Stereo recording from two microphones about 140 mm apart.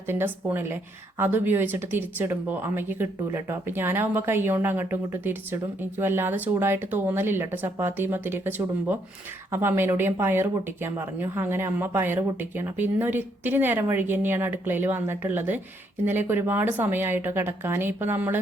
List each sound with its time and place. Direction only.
0.1 s speech: 15° right (ahead or behind)